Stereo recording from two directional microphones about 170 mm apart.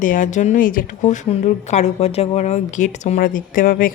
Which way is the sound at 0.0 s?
50° left (ahead or behind).